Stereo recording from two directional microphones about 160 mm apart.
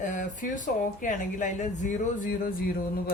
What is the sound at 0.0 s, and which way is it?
Speech, 55° left (ahead or behind).